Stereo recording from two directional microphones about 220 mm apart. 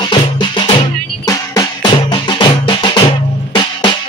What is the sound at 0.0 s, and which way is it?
Music, 20° left (ahead or behind).